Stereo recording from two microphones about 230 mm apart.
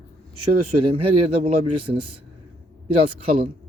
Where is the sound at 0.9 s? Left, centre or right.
Right.